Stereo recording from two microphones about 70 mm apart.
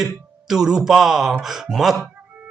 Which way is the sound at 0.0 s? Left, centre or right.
Centre.